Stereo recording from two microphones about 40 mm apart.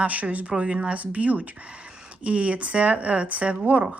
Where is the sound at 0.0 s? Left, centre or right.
Right.